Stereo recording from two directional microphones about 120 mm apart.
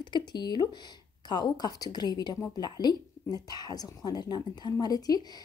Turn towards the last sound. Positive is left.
turn(degrees=30)  # may be behind; listen again after turning